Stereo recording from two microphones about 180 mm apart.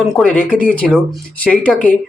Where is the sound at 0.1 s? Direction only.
5° left (ahead or behind).